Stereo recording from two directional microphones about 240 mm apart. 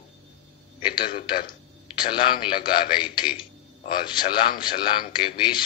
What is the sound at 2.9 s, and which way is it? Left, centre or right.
A man's voice, centre.